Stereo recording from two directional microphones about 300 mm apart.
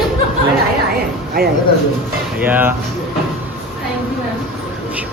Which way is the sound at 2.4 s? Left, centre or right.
Centre.